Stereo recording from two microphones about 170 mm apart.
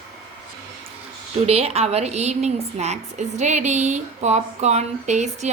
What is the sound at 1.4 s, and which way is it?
Speech, 40° right (ahead or behind).